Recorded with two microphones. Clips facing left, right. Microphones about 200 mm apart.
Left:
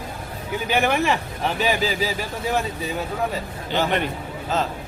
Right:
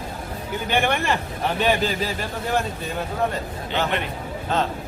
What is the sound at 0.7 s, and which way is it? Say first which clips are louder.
Speech: left 2 dB; 5° left (ahead or behind).